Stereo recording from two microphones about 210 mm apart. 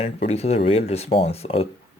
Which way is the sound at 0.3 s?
30° left (ahead or behind).